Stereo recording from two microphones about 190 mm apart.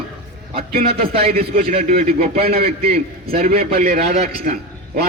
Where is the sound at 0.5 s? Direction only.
50° right (ahead or behind).